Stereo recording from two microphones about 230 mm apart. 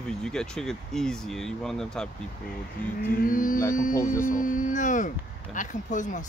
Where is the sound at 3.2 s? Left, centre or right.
Left.